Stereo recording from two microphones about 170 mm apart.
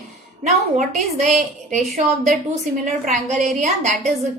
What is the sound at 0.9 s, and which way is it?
Speech, 45° right (ahead or behind).